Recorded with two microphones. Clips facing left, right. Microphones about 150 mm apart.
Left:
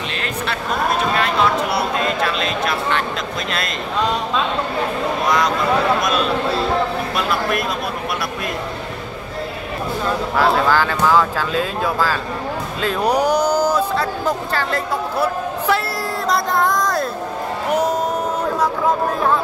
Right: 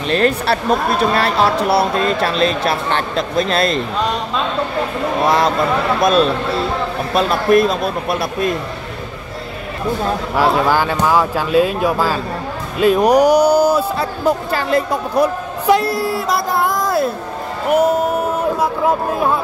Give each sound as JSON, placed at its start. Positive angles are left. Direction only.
{"t": 0.1, "sound": "speech", "side_deg": -40}
{"t": 5.2, "sound": "a man's voice", "side_deg": -30}
{"t": 7.2, "sound": "a man's voice", "side_deg": -30}
{"t": 10.3, "sound": "a man's voice", "side_deg": -15}